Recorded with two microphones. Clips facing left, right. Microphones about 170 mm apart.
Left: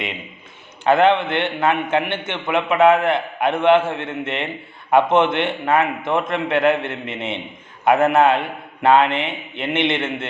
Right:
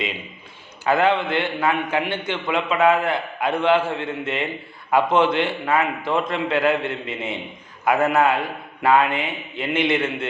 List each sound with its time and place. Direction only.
0.9 s a man's voice: 25° left (ahead or behind)